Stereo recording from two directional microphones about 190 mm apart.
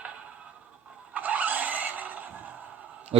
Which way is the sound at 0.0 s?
5° right (ahead or behind).